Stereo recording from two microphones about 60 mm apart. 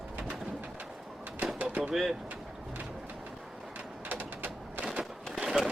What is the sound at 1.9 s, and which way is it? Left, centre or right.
Speech, centre.